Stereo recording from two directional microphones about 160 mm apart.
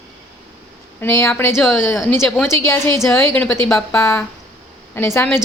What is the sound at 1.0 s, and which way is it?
Speech, 15° left (ahead or behind).